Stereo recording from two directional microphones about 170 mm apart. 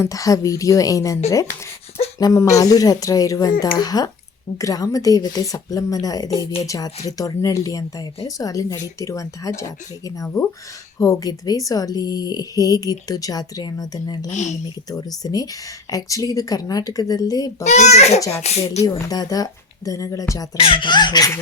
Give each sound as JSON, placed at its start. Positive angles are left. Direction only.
{"t": 0.0, "sound": "speech", "side_deg": 20}
{"t": 14.3, "sound": "speech", "side_deg": 45}
{"t": 14.8, "sound": "speech", "side_deg": 20}
{"t": 17.6, "sound": "a child's voice", "side_deg": 40}
{"t": 18.2, "sound": "speech", "side_deg": 15}
{"t": 18.4, "sound": "a child's voice", "side_deg": 40}
{"t": 18.9, "sound": "speech", "side_deg": 20}
{"t": 20.6, "sound": "speech", "side_deg": 30}